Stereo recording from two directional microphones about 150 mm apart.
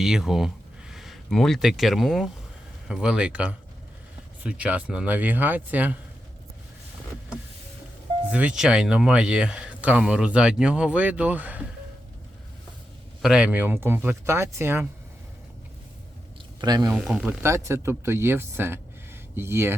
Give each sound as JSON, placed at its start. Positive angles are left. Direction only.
{"t": 0.0, "sound": "speech", "side_deg": -5}
{"t": 8.3, "sound": "speech", "side_deg": -10}
{"t": 13.2, "sound": "speech", "side_deg": -5}
{"t": 16.6, "sound": "speech", "side_deg": -25}
{"t": 17.0, "sound": "speech", "side_deg": -5}
{"t": 17.4, "sound": "speech", "side_deg": -20}